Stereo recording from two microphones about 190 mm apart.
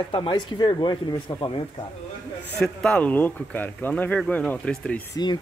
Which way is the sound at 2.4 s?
5° left (ahead or behind).